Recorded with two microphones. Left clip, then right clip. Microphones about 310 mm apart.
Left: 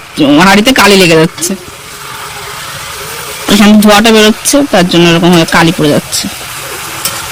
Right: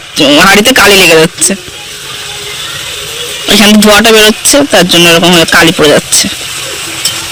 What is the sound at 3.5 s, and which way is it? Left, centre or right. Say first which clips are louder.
Speech: right 2 dB; centre.